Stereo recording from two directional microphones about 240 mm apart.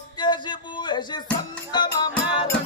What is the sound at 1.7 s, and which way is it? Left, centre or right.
Music, centre.